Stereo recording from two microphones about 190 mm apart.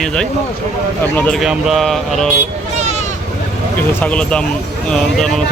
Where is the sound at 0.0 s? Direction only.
5° left (ahead or behind).